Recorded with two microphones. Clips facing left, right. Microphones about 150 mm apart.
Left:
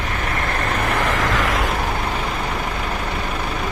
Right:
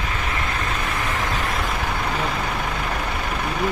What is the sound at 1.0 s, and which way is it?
Vehicle, 90° left.